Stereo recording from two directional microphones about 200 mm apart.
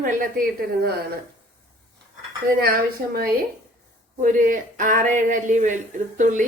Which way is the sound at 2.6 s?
50° right (ahead or behind).